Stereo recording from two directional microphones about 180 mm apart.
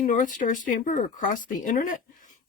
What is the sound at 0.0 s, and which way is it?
Speech, 45° left (ahead or behind).